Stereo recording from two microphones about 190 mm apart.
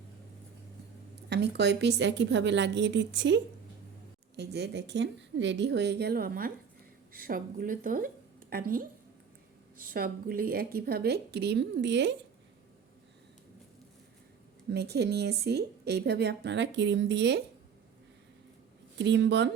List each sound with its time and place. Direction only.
1.3 s a woman's voice: 60° right (ahead or behind)
4.4 s a woman's voice: 60° right (ahead or behind)
14.7 s a woman's voice: 60° right (ahead or behind)
18.9 s a woman's voice: 65° right (ahead or behind)